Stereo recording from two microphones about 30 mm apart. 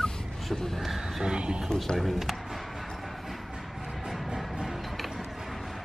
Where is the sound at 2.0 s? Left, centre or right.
Centre.